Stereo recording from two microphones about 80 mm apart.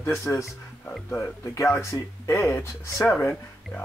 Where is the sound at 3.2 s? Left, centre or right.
Left.